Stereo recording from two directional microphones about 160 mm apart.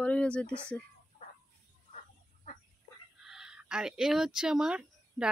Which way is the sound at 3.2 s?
5° right (ahead or behind).